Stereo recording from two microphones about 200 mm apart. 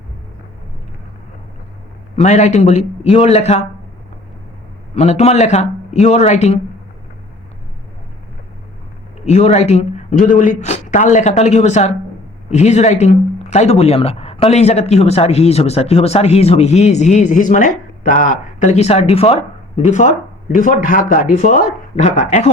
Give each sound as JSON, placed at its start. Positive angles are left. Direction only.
{"t": 2.1, "sound": "speech", "side_deg": 35}
{"t": 4.9, "sound": "speech", "side_deg": 35}
{"t": 9.2, "sound": "speech", "side_deg": 35}